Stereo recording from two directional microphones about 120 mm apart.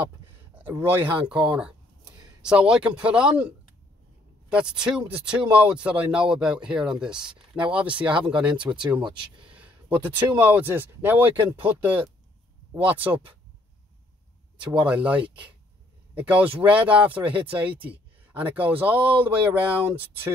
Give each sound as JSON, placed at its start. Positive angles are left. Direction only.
{"t": 0.6, "sound": "speech", "side_deg": -15}
{"t": 8.5, "sound": "speech", "side_deg": -40}
{"t": 9.6, "sound": "a sound", "side_deg": -15}
{"t": 10.3, "sound": "speech", "side_deg": -15}
{"t": 12.7, "sound": "speech", "side_deg": -15}
{"t": 14.6, "sound": "speech", "side_deg": -10}